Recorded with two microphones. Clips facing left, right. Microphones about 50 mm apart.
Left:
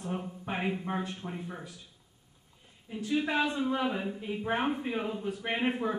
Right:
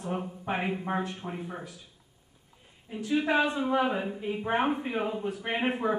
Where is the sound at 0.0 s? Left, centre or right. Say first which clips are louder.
Right 3 dB; centre.